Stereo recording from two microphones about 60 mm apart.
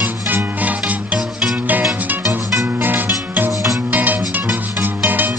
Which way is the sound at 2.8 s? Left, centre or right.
Right.